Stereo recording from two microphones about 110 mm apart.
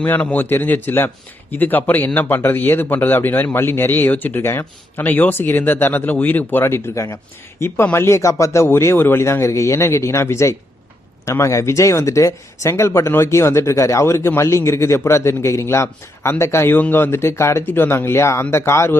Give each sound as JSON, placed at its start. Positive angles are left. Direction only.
{"t": 0.0, "sound": "a man's voice", "side_deg": 15}